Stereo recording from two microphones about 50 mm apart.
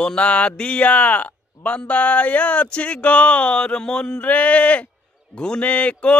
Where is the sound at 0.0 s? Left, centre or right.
Left.